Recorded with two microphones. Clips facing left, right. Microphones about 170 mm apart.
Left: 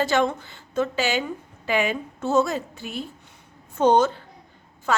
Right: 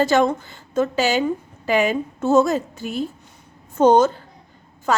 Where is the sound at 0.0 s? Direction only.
40° right (ahead or behind).